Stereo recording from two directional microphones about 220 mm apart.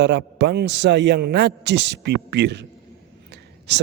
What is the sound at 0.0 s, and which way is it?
A man's voice, 50° right (ahead or behind).